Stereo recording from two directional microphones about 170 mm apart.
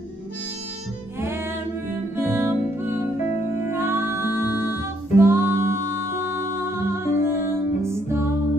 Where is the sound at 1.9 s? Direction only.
15° right (ahead or behind).